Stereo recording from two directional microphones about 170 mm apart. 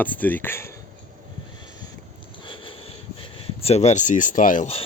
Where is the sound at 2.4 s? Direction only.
30° left (ahead or behind).